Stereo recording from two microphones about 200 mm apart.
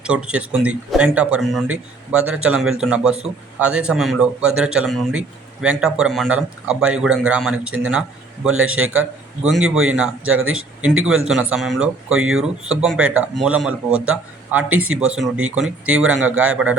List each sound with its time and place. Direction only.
0.0 s speech: 5° right (ahead or behind)
8.5 s speech: 90° right
9.4 s speech: 5° right (ahead or behind)
10.2 s speech: 90° right
11.3 s speech: 5° right (ahead or behind)